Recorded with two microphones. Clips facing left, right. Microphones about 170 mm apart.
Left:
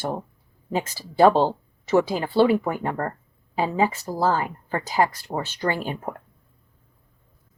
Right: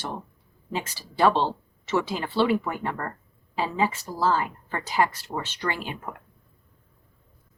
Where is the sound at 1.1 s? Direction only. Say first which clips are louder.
Left 5 dB; 45° left (ahead or behind).